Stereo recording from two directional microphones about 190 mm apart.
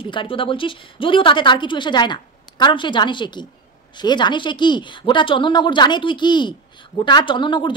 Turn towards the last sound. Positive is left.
turn(degrees=25)  # may be behind; listen again after turning